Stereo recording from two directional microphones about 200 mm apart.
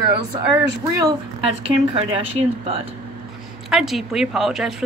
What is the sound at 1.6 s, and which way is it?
Speech, 30° right (ahead or behind).